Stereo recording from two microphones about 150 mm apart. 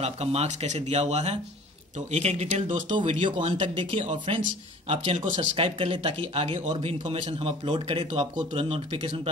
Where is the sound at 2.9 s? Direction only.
35° right (ahead or behind).